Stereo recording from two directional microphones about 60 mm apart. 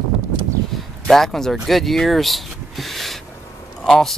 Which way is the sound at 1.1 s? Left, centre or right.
Centre.